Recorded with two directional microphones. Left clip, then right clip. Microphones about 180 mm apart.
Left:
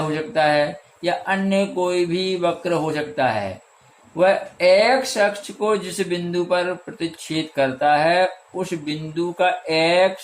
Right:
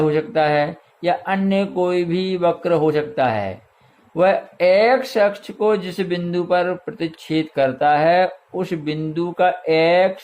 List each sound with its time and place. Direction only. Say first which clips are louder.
0.1 s speech: right 1 dB; 50° right (ahead or behind)